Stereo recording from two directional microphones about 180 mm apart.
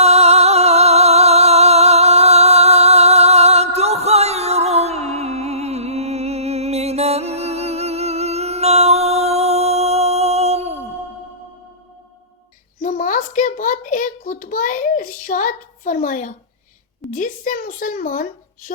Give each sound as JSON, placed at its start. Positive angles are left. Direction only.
{"t": 0.0, "sound": "music", "side_deg": -35}
{"t": 12.8, "sound": "a sound", "side_deg": 45}
{"t": 17.1, "sound": "speech", "side_deg": 50}